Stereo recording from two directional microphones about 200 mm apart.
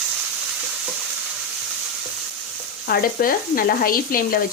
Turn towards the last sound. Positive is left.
turn(degrees=45)  # may be behind; listen again after turning